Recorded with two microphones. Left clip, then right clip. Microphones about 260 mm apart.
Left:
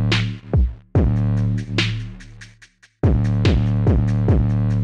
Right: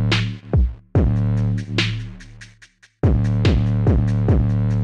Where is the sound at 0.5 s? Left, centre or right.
Right.